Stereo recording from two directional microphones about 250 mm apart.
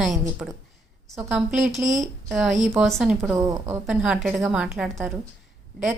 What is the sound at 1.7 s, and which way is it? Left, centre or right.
Speech, right.